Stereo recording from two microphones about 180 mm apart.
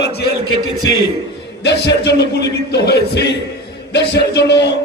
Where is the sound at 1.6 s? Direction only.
70° left (ahead or behind).